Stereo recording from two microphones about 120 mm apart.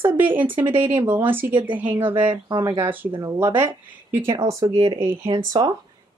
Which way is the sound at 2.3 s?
40° right (ahead or behind).